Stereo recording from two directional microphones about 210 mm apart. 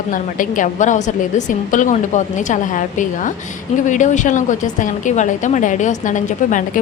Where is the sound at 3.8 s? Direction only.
35° left (ahead or behind).